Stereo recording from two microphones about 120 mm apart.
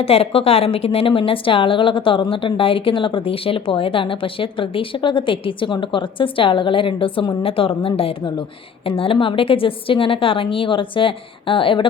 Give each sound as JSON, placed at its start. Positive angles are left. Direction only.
{"t": 0.0, "sound": "speech", "side_deg": 55}